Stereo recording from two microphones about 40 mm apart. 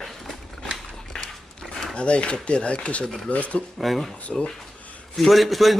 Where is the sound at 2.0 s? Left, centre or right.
Left.